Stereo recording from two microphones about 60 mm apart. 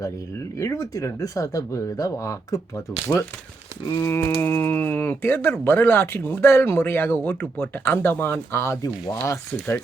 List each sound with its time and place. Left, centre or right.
0.6 s speech: left
4.0 s speech: left
8.8 s speech: left